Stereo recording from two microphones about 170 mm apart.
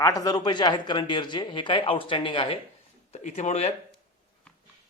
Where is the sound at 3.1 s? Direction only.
40° left (ahead or behind).